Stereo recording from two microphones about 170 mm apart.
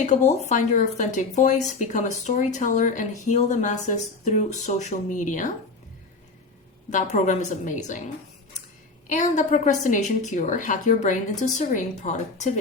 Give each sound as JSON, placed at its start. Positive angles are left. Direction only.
{"t": 0.0, "sound": "speech", "side_deg": 45}
{"t": 6.9, "sound": "speech", "side_deg": 45}